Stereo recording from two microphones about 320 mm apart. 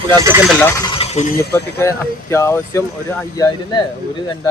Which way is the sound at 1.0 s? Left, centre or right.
Centre.